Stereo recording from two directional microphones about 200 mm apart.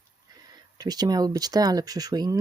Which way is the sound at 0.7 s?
20° right (ahead or behind).